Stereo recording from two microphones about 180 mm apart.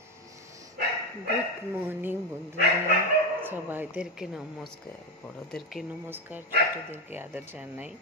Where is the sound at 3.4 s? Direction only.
10° right (ahead or behind).